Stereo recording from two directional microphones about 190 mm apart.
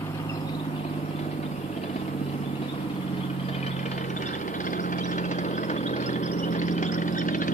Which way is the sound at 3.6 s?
40° left (ahead or behind).